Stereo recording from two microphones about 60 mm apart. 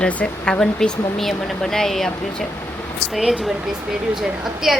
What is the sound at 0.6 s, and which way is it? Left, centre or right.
Speech, centre.